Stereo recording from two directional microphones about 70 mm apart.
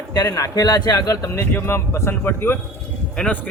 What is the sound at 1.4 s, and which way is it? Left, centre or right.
Speech, left.